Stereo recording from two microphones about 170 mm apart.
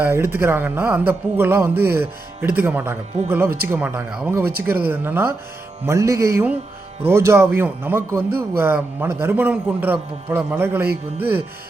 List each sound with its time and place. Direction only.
0.0 s speech: 15° right (ahead or behind)